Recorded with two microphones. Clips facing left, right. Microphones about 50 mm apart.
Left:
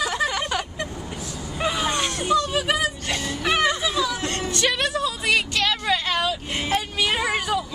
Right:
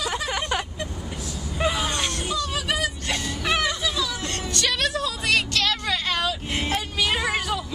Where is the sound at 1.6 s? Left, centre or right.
Centre.